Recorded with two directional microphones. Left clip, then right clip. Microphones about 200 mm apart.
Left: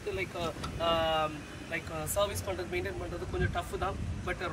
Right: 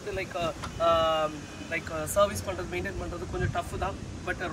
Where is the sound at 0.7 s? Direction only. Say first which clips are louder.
Right 5 dB; 5° right (ahead or behind).